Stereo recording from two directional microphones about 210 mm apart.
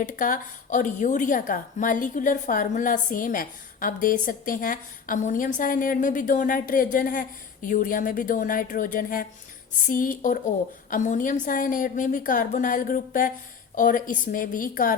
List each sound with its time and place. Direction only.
0.0 s a woman's voice: 40° left (ahead or behind)